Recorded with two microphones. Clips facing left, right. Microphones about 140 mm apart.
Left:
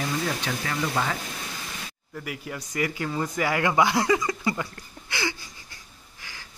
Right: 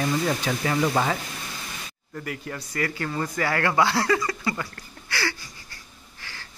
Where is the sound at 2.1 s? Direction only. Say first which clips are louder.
Right 2 dB; 10° left (ahead or behind).